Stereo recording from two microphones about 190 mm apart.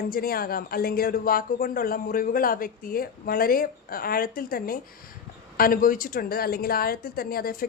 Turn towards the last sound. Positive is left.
turn(degrees=50)  # may be behind; listen again after turning